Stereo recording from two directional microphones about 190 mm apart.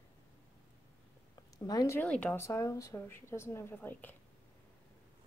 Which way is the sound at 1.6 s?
20° left (ahead or behind).